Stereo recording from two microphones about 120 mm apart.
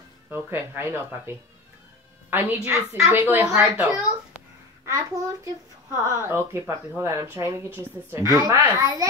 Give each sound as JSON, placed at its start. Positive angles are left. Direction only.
{"t": 0.3, "sound": "speech", "side_deg": -20}
{"t": 2.3, "sound": "a woman's voice", "side_deg": -15}
{"t": 4.8, "sound": "speech", "side_deg": -25}